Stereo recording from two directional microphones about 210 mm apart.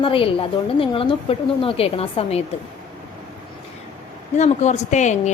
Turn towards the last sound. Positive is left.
turn(degrees=35)  # may be behind; listen again after turning